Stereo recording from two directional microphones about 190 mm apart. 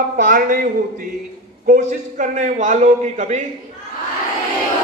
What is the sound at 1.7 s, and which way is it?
A man's voice, 40° right (ahead or behind).